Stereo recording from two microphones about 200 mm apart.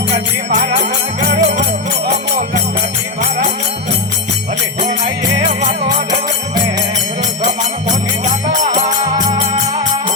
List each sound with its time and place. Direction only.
0.1 s music: 30° right (ahead or behind)
8.5 s music: 40° right (ahead or behind)